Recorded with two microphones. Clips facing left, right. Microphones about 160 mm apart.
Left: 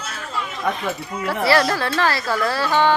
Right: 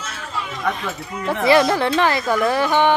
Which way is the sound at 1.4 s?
20° right (ahead or behind).